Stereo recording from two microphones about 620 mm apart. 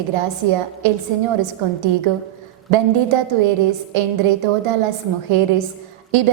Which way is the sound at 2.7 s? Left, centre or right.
Right.